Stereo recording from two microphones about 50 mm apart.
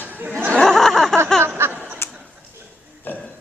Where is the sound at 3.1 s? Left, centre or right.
Left.